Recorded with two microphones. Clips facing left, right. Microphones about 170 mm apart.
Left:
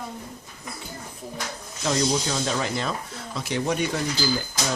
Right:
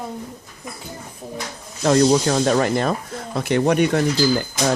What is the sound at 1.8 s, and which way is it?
Speech, 60° right (ahead or behind).